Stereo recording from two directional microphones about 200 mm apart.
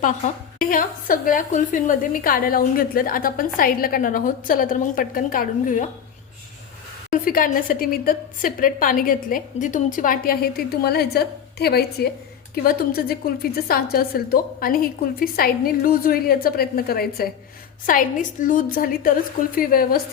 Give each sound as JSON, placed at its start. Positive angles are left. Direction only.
{"t": 0.7, "sound": "a woman's voice", "side_deg": 45}
{"t": 7.1, "sound": "a woman's voice", "side_deg": 45}